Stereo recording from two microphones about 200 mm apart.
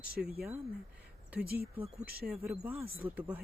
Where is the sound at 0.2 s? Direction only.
50° right (ahead or behind).